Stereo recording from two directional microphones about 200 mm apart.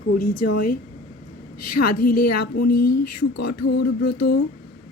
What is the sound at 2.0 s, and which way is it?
A woman's voice, 50° left (ahead or behind).